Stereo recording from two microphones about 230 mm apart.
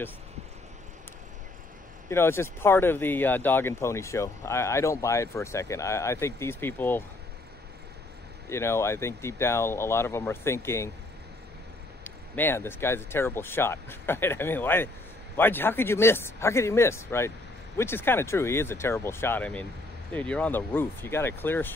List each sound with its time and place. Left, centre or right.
2.0 s speech: centre
8.5 s speech: centre
12.0 s speech: centre